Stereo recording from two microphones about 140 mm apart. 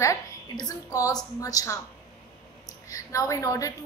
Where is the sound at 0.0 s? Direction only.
25° left (ahead or behind).